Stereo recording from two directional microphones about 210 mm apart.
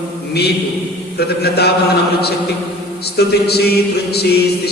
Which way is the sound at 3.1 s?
50° left (ahead or behind).